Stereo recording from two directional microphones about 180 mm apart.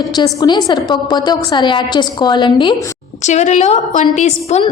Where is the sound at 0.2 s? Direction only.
25° left (ahead or behind).